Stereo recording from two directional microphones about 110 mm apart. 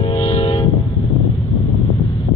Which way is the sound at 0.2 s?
60° left (ahead or behind).